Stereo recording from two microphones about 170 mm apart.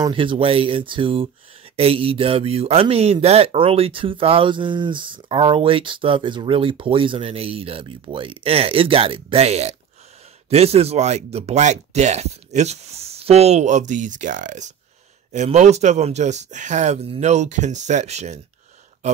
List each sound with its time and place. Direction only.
0.0 s speech: 30° right (ahead or behind)